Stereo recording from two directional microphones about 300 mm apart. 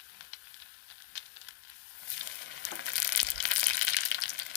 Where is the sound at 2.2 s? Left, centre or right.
Left.